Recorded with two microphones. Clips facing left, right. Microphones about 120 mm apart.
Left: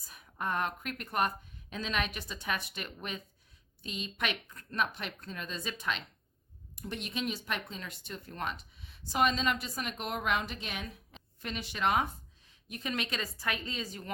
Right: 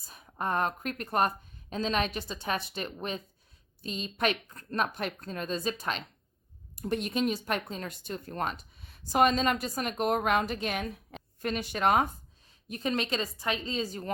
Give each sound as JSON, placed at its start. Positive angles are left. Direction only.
{"t": 0.1, "sound": "a woman's voice", "side_deg": -35}